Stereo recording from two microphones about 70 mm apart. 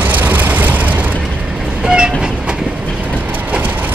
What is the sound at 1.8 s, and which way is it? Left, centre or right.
Train, centre.